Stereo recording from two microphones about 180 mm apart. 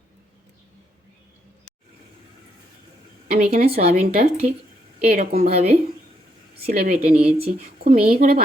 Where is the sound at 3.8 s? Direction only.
45° right (ahead or behind).